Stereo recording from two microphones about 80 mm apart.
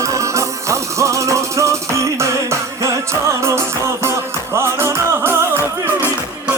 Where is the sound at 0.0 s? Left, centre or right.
Right.